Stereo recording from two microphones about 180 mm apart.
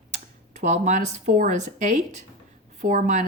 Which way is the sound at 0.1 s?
40° right (ahead or behind).